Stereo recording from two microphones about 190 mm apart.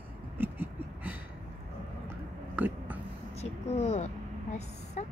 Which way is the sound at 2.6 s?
10° right (ahead or behind).